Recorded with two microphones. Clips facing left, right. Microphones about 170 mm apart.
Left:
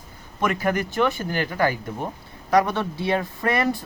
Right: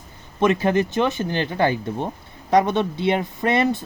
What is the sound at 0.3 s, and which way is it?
A woman's voice, 25° right (ahead or behind).